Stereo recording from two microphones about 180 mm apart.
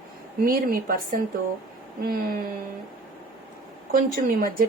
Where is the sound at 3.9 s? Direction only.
50° right (ahead or behind).